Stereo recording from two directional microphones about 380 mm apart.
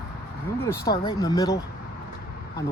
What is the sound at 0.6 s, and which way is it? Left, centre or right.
Speech, centre.